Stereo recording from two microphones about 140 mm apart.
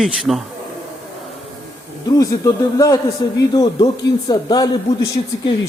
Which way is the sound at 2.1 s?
25° left (ahead or behind).